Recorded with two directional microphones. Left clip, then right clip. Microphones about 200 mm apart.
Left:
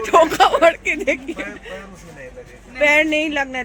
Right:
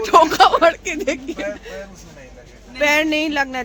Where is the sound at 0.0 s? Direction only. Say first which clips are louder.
Right 1 dB; 5° right (ahead or behind).